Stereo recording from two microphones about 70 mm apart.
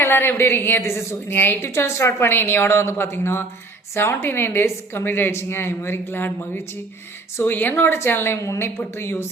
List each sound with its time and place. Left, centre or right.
0.0 s a woman's voice: left